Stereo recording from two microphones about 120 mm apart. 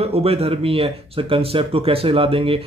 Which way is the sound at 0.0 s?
55° right (ahead or behind).